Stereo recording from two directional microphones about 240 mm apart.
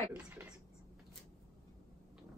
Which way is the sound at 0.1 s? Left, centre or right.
Centre.